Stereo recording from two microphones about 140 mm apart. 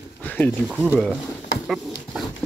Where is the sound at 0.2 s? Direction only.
10° left (ahead or behind).